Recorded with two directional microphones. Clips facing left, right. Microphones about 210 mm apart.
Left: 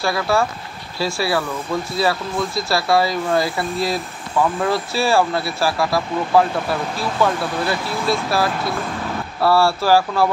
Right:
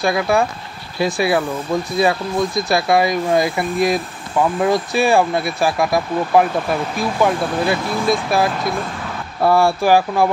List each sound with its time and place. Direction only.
0.0 s speech: 15° right (ahead or behind)